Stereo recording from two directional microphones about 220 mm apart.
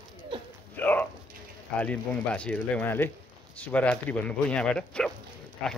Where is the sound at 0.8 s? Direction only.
10° left (ahead or behind).